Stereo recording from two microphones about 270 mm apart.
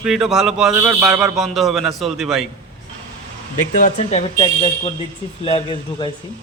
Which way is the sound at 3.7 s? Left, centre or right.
Left.